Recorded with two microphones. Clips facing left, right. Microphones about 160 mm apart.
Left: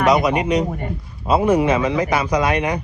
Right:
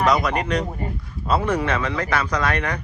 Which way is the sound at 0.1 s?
10° left (ahead or behind).